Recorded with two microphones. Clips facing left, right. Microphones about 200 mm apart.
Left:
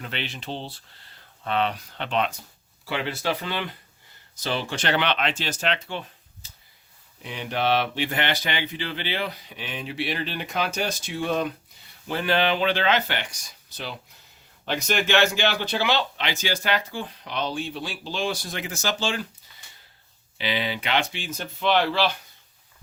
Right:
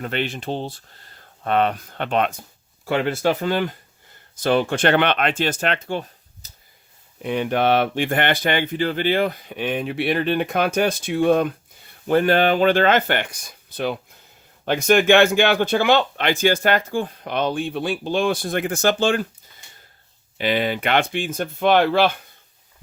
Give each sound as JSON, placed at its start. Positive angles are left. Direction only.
{"t": 0.0, "sound": "speech", "side_deg": -50}
{"t": 7.2, "sound": "speech", "side_deg": -55}
{"t": 20.4, "sound": "speech", "side_deg": -50}